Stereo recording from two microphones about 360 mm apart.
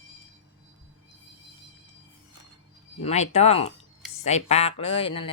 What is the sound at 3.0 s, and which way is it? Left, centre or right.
Speech, centre.